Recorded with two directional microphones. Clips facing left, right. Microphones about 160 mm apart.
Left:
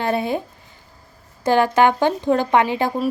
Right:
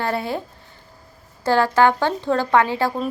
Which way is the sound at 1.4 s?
20° left (ahead or behind).